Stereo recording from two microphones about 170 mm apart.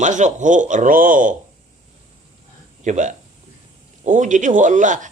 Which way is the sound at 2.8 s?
45° right (ahead or behind).